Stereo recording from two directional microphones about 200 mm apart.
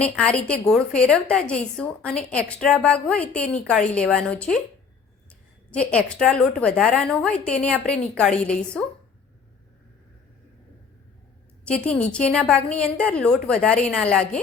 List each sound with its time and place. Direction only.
0.0 s a woman's voice: 5° left (ahead or behind)
5.7 s a woman's voice: 5° left (ahead or behind)
11.6 s a woman's voice: 5° left (ahead or behind)